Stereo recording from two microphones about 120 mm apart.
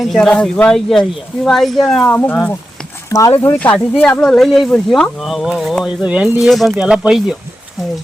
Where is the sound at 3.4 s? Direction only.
15° left (ahead or behind).